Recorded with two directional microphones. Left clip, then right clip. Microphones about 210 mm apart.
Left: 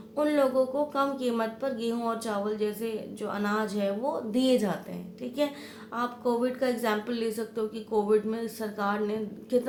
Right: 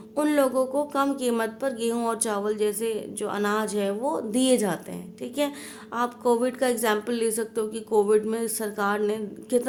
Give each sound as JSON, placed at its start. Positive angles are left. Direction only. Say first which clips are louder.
{"t": 0.2, "sound": "speech", "louder": "right 2 dB", "side_deg": -45}
{"t": 5.9, "sound": "speech", "louder": "right 5 dB", "side_deg": -45}